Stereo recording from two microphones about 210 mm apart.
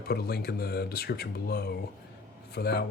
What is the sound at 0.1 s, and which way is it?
Speech, 50° left (ahead or behind).